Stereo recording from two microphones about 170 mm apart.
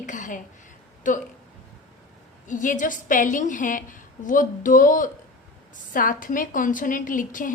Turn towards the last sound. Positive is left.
turn(degrees=50)  # may be behind; listen again after turning